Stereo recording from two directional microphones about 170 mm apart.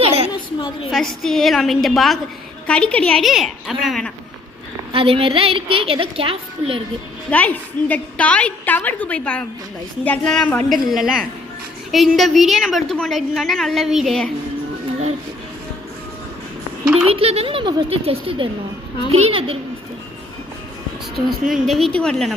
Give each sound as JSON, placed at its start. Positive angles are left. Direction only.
{"t": 0.0, "sound": "a sound", "side_deg": -35}
{"t": 0.9, "sound": "a woman's voice", "side_deg": 0}
{"t": 4.9, "sound": "a woman's voice", "side_deg": -35}
{"t": 7.3, "sound": "a woman's voice", "side_deg": 10}
{"t": 17.1, "sound": "a woman's voice", "side_deg": -35}
{"t": 21.5, "sound": "a woman's voice", "side_deg": 0}